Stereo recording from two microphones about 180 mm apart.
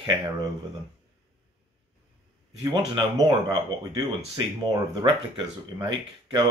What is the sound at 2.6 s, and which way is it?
Speech, 20° right (ahead or behind).